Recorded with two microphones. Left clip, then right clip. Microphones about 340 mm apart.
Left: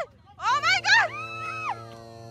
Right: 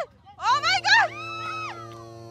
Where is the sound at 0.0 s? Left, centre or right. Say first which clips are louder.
Right 2 dB; centre.